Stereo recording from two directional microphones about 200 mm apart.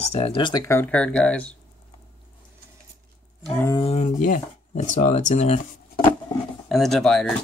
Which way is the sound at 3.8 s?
35° left (ahead or behind).